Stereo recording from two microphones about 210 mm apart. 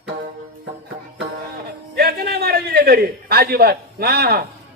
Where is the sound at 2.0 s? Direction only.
50° right (ahead or behind).